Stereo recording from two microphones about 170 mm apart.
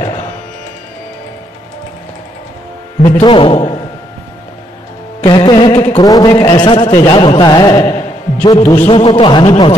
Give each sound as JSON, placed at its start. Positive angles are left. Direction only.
{"t": 3.0, "sound": "a man's voice", "side_deg": 40}
{"t": 3.3, "sound": "speech", "side_deg": 30}
{"t": 5.2, "sound": "music", "side_deg": 25}
{"t": 5.9, "sound": "a man's voice", "side_deg": 25}